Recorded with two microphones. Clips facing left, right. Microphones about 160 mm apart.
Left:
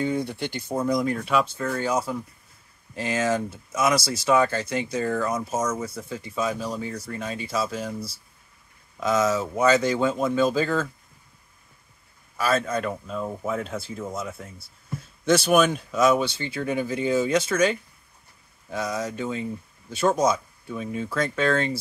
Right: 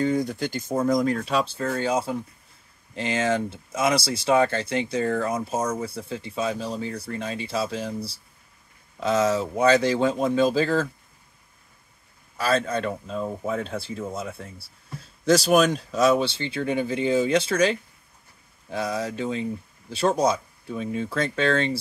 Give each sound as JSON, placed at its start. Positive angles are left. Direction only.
{"t": 0.0, "sound": "speech", "side_deg": -45}
{"t": 1.2, "sound": "speech", "side_deg": -30}
{"t": 12.4, "sound": "speech", "side_deg": -30}